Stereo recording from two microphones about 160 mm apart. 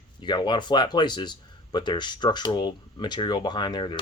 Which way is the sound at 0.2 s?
30° left (ahead or behind).